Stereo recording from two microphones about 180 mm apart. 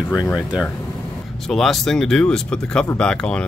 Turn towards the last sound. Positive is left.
turn(degrees=5)  # may be behind; listen again after turning